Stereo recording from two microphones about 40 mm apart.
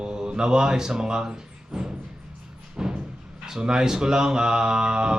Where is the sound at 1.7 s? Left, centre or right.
Centre.